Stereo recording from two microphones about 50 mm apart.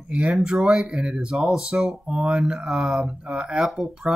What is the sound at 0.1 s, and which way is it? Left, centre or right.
Speech, right.